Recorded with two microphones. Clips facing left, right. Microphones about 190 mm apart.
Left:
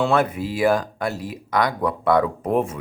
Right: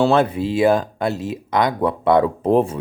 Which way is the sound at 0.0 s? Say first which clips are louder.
Right 4 dB; 30° right (ahead or behind).